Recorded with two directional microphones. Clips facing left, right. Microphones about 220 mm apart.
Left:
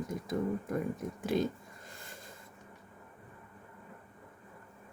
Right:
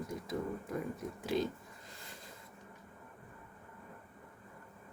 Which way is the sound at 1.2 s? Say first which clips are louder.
Left 3 dB; 50° left (ahead or behind).